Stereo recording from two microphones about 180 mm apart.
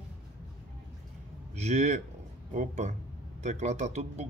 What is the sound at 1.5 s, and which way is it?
A man's voice, 40° right (ahead or behind).